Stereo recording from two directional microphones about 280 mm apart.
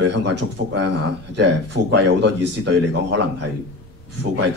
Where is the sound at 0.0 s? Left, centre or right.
Right.